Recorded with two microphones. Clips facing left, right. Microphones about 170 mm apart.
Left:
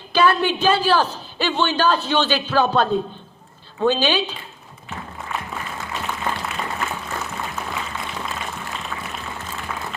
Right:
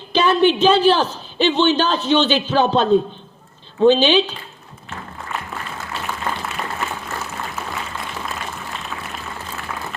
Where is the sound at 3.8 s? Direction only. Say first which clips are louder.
Right 6 dB; 20° right (ahead or behind).